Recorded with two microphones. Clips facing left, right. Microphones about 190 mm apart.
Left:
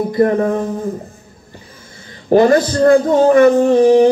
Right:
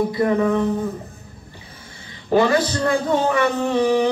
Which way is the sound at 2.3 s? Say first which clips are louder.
Left 6 dB; 45° left (ahead or behind).